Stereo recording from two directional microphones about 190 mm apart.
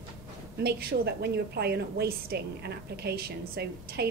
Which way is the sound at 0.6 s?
55° right (ahead or behind).